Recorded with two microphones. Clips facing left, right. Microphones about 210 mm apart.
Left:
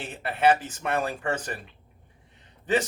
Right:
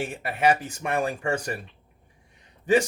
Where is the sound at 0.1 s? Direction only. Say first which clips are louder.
Left 4 dB; 10° right (ahead or behind).